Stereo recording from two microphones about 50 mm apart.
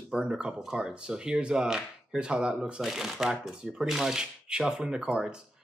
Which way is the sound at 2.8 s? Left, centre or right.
Centre.